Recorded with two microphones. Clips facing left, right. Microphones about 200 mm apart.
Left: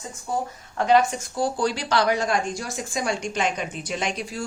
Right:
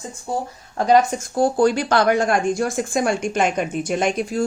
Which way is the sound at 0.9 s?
45° right (ahead or behind).